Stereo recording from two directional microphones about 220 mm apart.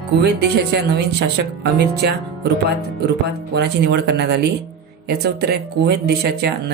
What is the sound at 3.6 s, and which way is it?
Speech, 50° right (ahead or behind).